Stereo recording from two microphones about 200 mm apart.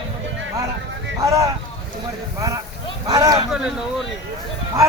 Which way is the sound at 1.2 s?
15° right (ahead or behind).